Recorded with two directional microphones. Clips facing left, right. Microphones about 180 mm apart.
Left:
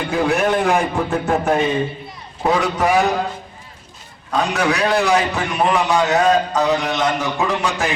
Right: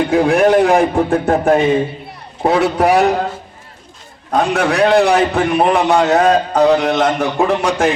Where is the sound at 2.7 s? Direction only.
60° right (ahead or behind).